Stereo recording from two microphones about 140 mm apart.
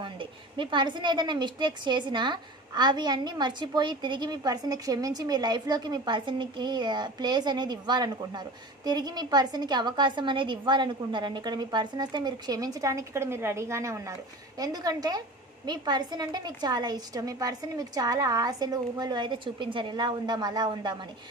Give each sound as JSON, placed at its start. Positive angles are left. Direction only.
{"t": 0.0, "sound": "a woman's voice", "side_deg": -35}